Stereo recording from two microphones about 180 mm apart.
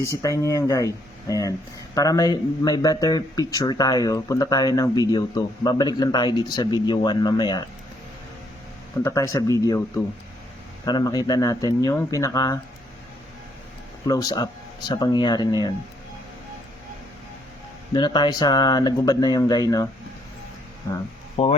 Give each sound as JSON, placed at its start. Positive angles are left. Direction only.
{"t": 0.0, "sound": "speech", "side_deg": 20}
{"t": 9.0, "sound": "speech", "side_deg": 15}
{"t": 14.1, "sound": "speech", "side_deg": 20}
{"t": 17.9, "sound": "speech", "side_deg": 25}
{"t": 21.4, "sound": "speech", "side_deg": 35}